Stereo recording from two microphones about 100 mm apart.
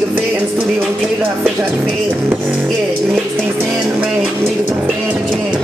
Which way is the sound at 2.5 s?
Centre (ahead or behind).